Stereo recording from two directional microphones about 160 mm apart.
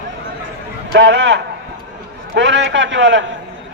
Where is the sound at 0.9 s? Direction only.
90° right.